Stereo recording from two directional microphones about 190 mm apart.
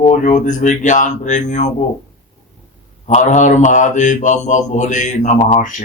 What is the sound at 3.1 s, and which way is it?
Mantra, 40° left (ahead or behind).